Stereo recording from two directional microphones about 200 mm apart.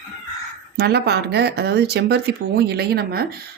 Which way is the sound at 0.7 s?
55° right (ahead or behind).